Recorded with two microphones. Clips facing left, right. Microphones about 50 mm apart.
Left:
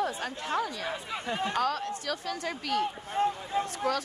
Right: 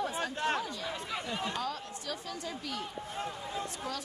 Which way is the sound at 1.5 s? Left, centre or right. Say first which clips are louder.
Left 7 dB; left.